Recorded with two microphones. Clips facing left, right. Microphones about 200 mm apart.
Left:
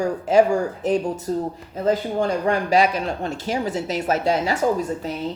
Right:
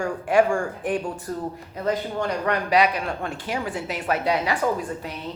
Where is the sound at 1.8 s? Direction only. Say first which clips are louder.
Left 4 dB; 30° left (ahead or behind).